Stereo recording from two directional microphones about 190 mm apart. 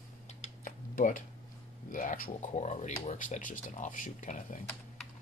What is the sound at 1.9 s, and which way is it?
Speech, 45° left (ahead or behind).